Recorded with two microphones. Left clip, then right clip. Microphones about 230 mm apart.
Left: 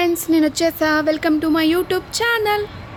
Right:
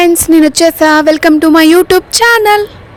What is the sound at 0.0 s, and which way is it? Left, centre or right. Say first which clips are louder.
Speech: right 10 dB; right.